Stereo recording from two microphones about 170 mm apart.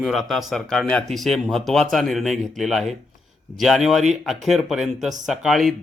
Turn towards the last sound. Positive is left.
turn(degrees=0)  # may be behind; listen again after turning